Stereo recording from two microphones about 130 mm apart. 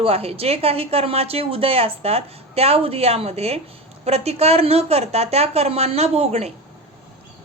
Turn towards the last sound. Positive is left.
turn(degrees=-55)  # may be behind; listen again after turning